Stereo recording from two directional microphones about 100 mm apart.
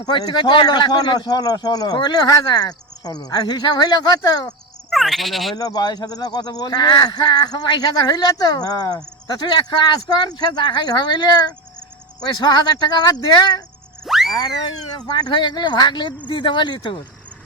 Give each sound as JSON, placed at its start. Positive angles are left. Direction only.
{"t": 0.0, "sound": "a man's voice", "side_deg": 45}
{"t": 4.9, "sound": "speech", "side_deg": 0}
{"t": 5.5, "sound": "a man's voice", "side_deg": 40}
{"t": 14.0, "sound": "a sound", "side_deg": 0}
{"t": 15.2, "sound": "a man's voice", "side_deg": 50}